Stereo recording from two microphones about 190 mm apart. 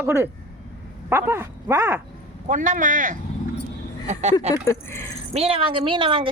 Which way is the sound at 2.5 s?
45° right (ahead or behind).